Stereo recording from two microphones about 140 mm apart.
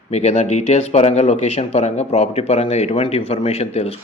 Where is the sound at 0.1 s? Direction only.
50° left (ahead or behind).